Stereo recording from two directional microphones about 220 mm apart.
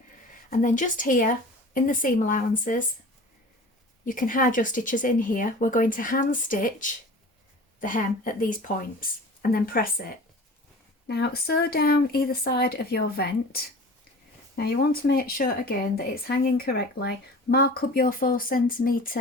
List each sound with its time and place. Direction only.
0.6 s a woman's voice: 35° left (ahead or behind)
4.0 s a woman's voice: 40° left (ahead or behind)
11.0 s speech: 50° left (ahead or behind)